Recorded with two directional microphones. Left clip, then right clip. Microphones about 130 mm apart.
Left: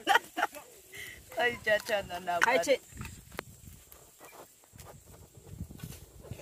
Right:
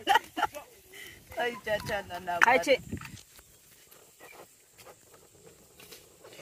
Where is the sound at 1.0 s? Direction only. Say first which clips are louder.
Left 2 dB; centre (ahead or behind).